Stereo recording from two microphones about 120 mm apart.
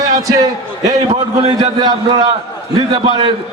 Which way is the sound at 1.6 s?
35° right (ahead or behind).